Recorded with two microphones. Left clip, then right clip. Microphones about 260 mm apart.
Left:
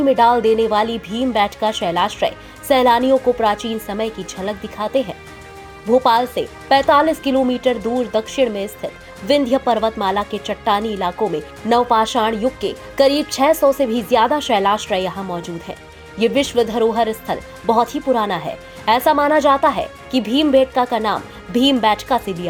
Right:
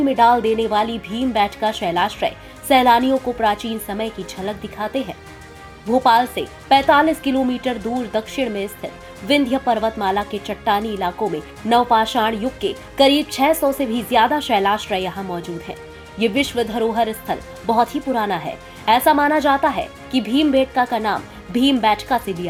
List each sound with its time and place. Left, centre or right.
0.0 s a woman's voice: left